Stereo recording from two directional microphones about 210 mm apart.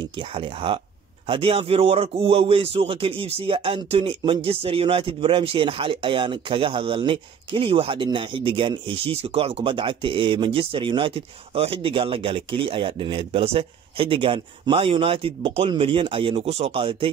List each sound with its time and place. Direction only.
0.3 s speech: 25° right (ahead or behind)